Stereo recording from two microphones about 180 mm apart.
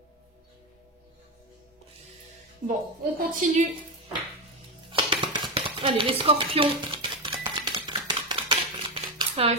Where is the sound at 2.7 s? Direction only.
50° right (ahead or behind).